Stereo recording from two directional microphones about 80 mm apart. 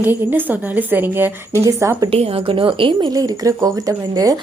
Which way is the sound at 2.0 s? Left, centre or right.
Right.